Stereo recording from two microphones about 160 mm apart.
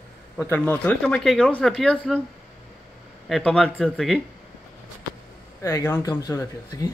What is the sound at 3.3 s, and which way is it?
Speech, 5° left (ahead or behind).